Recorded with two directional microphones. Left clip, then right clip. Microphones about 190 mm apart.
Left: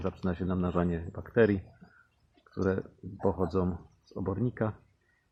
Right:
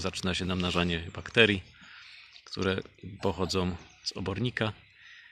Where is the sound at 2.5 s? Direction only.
20° right (ahead or behind).